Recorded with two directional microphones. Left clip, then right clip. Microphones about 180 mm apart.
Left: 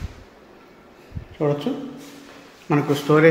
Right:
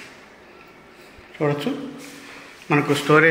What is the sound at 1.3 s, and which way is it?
A man's voice, 15° left (ahead or behind).